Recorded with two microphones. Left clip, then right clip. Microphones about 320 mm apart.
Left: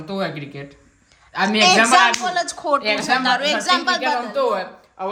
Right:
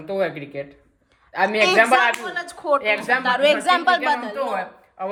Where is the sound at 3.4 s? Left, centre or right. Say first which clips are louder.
Right 2 dB; centre.